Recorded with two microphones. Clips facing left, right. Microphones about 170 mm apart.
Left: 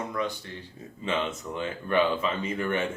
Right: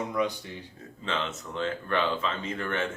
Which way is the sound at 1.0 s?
15° left (ahead or behind).